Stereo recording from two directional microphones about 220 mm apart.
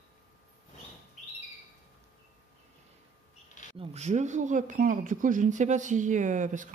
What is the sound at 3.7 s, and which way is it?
Speech, 30° right (ahead or behind).